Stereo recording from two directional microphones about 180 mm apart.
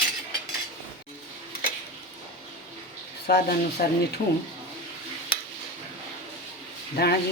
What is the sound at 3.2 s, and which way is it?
Speech, 60° left (ahead or behind).